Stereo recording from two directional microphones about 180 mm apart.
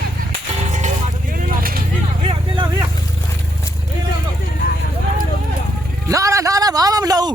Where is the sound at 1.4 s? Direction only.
55° right (ahead or behind).